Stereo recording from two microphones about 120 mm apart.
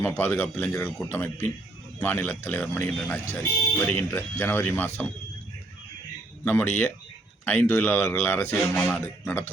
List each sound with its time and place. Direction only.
0.0 s speech: 15° left (ahead or behind)
6.4 s speech: 20° left (ahead or behind)